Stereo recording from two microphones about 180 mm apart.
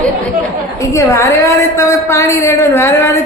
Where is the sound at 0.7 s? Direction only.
15° left (ahead or behind).